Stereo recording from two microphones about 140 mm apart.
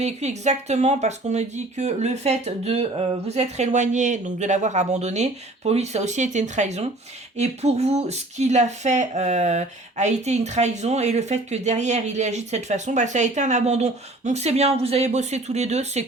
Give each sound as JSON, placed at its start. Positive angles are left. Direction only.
{"t": 0.0, "sound": "speech", "side_deg": -55}